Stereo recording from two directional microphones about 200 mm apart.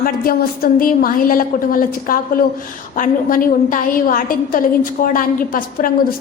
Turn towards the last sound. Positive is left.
turn(degrees=45)  # may be behind; listen again after turning